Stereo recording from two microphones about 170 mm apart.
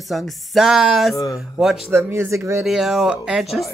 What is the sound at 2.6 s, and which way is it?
Speech, centre (ahead or behind).